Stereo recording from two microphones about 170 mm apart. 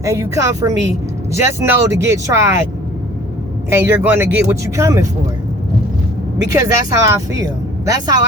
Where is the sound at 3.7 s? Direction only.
15° right (ahead or behind).